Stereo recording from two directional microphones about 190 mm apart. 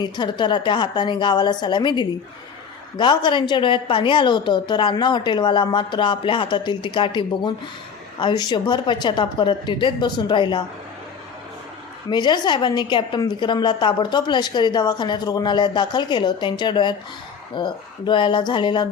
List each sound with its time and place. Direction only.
0.0 s a woman's voice: 25° left (ahead or behind)
12.1 s a woman's voice: 25° left (ahead or behind)